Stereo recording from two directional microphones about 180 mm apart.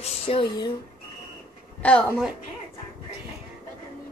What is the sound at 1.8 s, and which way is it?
Speech, 10° left (ahead or behind).